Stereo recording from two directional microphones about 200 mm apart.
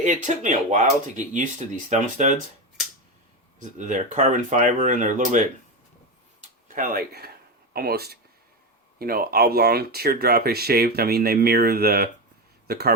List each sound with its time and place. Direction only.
0.0 s speech: 35° right (ahead or behind)
3.6 s speech: 40° right (ahead or behind)
6.7 s speech: 40° right (ahead or behind)